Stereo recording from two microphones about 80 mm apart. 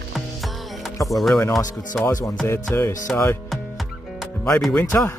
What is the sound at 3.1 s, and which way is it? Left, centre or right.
Music, centre.